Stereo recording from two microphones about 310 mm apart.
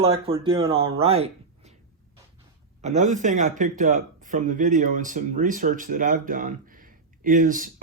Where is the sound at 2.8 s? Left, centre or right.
Right.